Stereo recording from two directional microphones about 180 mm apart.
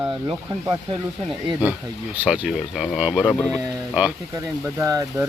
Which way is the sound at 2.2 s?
5° right (ahead or behind).